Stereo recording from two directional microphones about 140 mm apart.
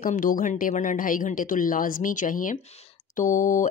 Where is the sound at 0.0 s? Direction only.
80° left.